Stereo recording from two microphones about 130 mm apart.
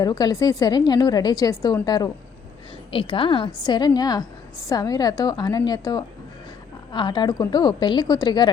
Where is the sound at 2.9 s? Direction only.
40° left (ahead or behind).